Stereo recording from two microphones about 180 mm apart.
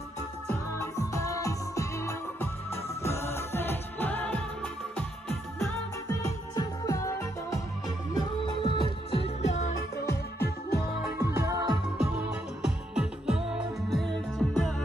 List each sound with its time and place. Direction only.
0.5 s music: 15° left (ahead or behind)
6.5 s music: 20° left (ahead or behind); by 9.7 s 40° left (ahead or behind)
10.0 s music: 65° left (ahead or behind)
11.1 s music: 15° right (ahead or behind)
12.6 s music: 5° right (ahead or behind)